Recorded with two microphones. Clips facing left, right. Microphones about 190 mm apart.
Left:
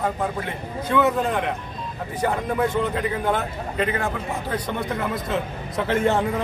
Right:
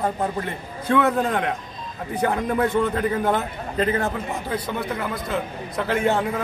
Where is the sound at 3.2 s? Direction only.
40° right (ahead or behind).